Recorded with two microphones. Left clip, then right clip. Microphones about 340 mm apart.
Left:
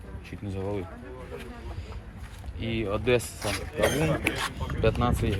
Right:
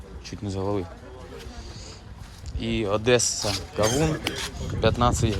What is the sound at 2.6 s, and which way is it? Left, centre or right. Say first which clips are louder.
Speech: right 4 dB; centre.